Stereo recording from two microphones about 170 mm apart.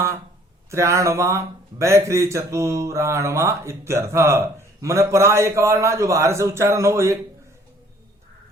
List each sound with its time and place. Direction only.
0.7 s speech: 15° right (ahead or behind)